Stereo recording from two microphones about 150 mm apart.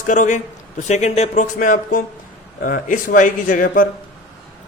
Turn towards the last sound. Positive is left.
turn(degrees=65)  # may be behind; listen again after turning